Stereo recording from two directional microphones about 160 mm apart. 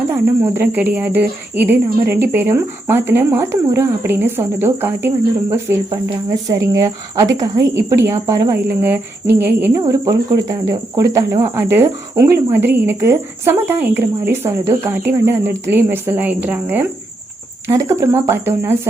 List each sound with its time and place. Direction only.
0.1 s cricket: 15° right (ahead or behind)
6.5 s speech: 20° right (ahead or behind)
9.6 s cricket: 15° right (ahead or behind)